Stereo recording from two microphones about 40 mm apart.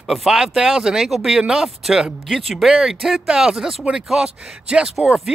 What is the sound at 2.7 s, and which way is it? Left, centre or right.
Speech, centre.